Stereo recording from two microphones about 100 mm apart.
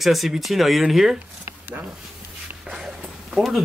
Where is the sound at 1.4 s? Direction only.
15° right (ahead or behind).